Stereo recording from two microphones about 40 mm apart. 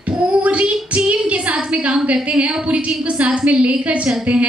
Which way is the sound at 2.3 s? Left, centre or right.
Right.